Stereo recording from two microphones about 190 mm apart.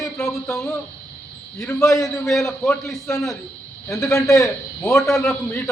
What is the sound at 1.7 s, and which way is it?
Speech, 15° left (ahead or behind).